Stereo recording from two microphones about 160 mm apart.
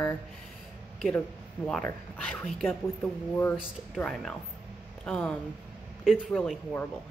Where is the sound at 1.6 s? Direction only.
10° left (ahead or behind).